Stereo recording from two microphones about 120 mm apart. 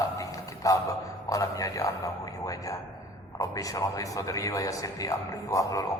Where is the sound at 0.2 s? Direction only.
30° left (ahead or behind).